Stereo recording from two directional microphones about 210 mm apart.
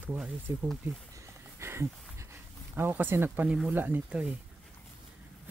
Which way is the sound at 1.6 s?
10° right (ahead or behind).